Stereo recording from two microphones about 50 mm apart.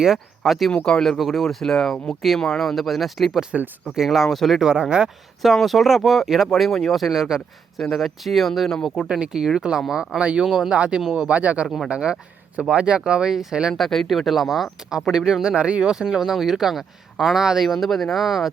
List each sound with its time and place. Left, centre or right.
0.0 s speech: centre
0.7 s speech: centre
1.2 s speech: centre
4.6 s speech: centre
5.0 s speech: centre
6.5 s speech: centre
9.0 s speech: centre
10.2 s speech: right
10.4 s speech: centre
10.8 s speech: centre
13.3 s speech: centre
13.7 s speech: centre